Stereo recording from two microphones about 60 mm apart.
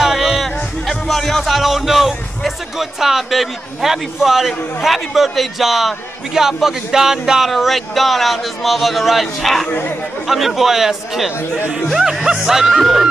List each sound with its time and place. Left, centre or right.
0.0 s a man's voice: centre
9.7 s speech: left
10.2 s a man's voice: centre